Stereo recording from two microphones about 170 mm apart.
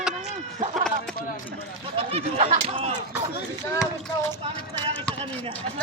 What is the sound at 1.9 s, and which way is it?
Speech, 40° right (ahead or behind).